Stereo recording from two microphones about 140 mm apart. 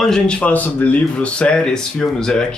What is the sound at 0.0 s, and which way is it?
Speech, 5° left (ahead or behind).